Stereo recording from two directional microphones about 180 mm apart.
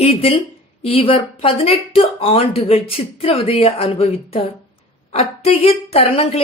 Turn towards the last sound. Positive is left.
turn(degrees=35)  # may be behind; listen again after turning